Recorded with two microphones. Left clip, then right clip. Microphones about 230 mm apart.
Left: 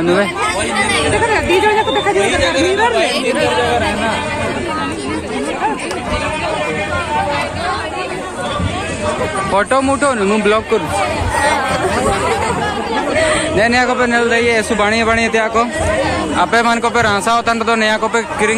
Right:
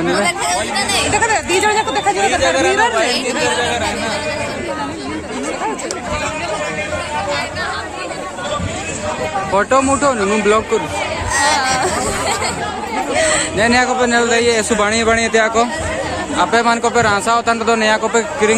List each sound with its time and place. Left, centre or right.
0.7 s chatter: right
9.6 s speech: centre
13.6 s speech: centre